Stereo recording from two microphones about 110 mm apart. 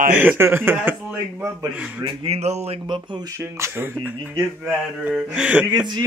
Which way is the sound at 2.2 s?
75° right (ahead or behind).